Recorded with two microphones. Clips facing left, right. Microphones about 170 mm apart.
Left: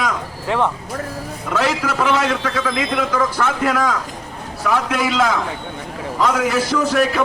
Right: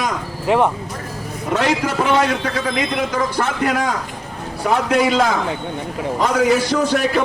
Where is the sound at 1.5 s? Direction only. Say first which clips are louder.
Right 1 dB; 25° right (ahead or behind).